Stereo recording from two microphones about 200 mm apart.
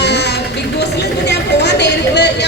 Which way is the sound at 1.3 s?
60° left (ahead or behind).